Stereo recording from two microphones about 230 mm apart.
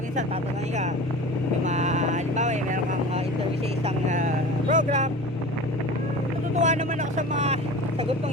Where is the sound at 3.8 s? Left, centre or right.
Right.